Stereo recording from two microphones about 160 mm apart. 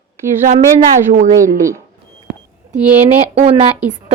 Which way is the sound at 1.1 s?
50° right (ahead or behind).